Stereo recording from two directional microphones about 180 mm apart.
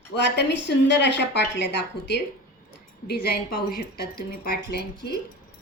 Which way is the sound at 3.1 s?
60° left (ahead or behind).